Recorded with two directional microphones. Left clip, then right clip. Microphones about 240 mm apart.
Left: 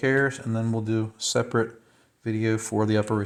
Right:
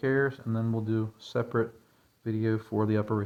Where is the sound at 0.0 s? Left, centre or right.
Left.